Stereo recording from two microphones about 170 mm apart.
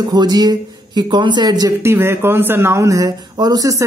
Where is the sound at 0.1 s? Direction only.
25° right (ahead or behind).